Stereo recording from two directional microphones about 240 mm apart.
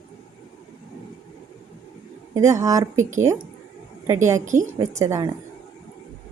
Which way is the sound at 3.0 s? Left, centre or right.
Right.